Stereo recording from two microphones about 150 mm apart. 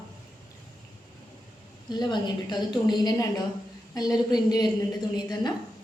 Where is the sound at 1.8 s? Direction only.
30° left (ahead or behind).